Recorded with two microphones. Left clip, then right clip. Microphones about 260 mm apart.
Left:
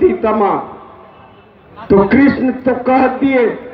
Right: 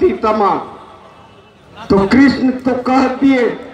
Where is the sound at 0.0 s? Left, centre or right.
Right.